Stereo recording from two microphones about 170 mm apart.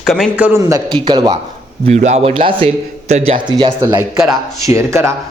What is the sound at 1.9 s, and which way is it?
A man's voice, 40° right (ahead or behind).